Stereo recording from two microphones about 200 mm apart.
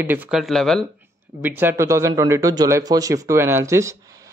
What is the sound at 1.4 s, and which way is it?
Speech, 10° right (ahead or behind).